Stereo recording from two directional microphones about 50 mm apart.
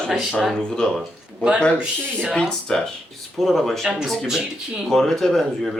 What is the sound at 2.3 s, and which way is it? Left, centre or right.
Speech, centre.